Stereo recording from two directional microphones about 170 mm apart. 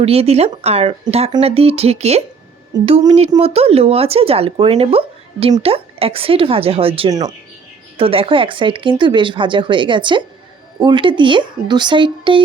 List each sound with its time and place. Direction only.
0.0 s speech: 35° right (ahead or behind)
7.1 s speech: 20° right (ahead or behind)
7.9 s speech: 35° right (ahead or behind)